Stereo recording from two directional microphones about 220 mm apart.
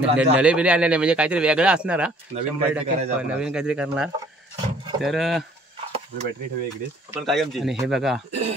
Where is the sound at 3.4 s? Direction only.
5° right (ahead or behind).